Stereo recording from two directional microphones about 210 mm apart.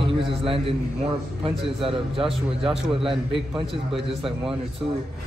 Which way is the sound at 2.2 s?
Centre (ahead or behind).